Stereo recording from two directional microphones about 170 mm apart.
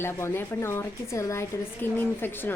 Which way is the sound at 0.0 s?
15° left (ahead or behind).